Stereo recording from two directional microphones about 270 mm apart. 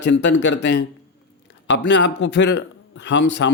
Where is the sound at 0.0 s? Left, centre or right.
Left.